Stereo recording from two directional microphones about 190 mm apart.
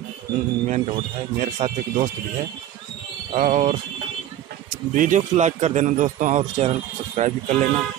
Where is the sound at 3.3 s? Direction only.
40° right (ahead or behind).